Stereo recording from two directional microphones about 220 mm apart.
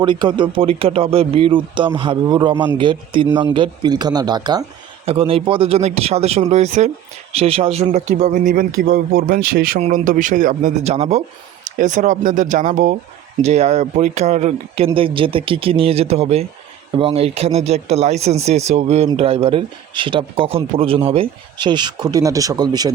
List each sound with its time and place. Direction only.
0.0 s speech: 20° right (ahead or behind)